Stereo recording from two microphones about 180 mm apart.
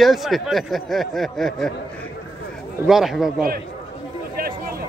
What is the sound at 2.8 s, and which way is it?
Speech, centre (ahead or behind).